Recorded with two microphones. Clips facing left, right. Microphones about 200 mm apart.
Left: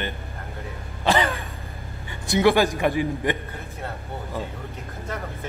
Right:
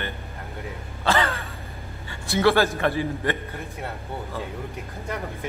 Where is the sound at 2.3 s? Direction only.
15° left (ahead or behind).